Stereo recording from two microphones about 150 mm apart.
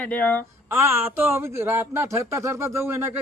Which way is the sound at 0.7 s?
15° right (ahead or behind).